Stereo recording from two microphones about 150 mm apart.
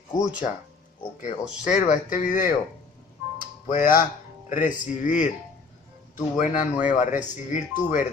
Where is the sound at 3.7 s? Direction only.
65° left (ahead or behind).